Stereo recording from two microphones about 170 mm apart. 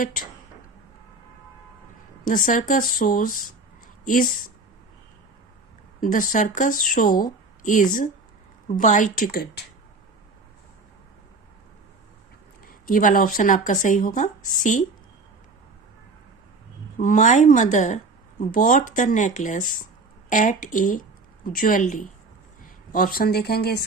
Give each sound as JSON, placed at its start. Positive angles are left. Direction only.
{"t": 0.0, "sound": "speech", "side_deg": 50}
{"t": 2.2, "sound": "speech", "side_deg": 50}
{"t": 6.0, "sound": "speech", "side_deg": 50}
{"t": 12.6, "sound": "speech", "side_deg": 55}
{"t": 17.0, "sound": "speech", "side_deg": 50}